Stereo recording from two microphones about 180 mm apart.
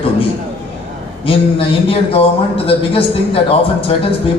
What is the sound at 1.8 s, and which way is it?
Speech, 30° left (ahead or behind).